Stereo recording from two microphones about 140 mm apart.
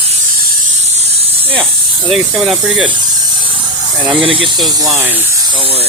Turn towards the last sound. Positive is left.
turn(degrees=-40)  # may be behind; listen again after turning